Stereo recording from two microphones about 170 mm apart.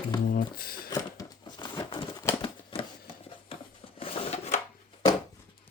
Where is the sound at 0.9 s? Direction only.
25° left (ahead or behind).